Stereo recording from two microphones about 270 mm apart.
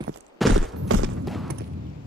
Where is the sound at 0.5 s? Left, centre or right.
Right.